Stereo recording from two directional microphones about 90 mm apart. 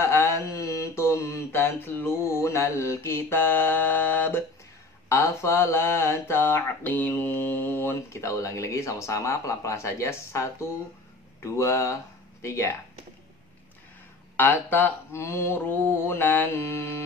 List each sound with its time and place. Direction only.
0.0 s a sound: 30° left (ahead or behind)
5.1 s speech: 30° left (ahead or behind)
14.3 s speech: 20° left (ahead or behind)